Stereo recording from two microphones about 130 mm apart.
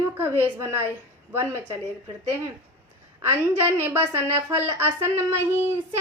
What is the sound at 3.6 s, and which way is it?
A woman's voice, 20° right (ahead or behind).